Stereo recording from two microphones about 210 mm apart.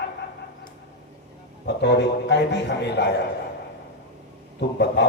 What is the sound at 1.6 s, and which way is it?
A man's voice, 55° left (ahead or behind).